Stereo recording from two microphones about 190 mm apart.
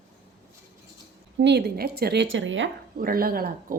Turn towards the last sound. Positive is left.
turn(degrees=-50)  # may be behind; listen again after turning